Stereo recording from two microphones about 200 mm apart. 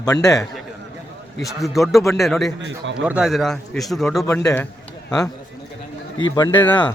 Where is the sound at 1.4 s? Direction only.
Centre (ahead or behind).